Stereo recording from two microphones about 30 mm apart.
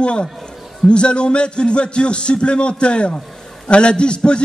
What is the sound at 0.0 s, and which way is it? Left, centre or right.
A man's voice, left.